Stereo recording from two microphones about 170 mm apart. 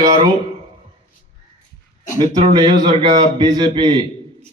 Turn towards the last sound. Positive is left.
turn(degrees=-25)  # may be behind; listen again after turning